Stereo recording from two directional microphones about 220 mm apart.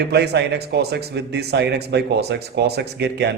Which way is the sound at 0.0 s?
50° right (ahead or behind).